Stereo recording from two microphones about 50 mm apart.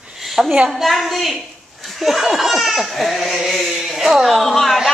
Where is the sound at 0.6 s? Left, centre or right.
Centre.